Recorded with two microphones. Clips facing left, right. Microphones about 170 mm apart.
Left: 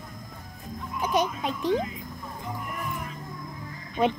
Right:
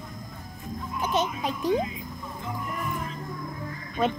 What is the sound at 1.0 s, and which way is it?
Music, 10° left (ahead or behind).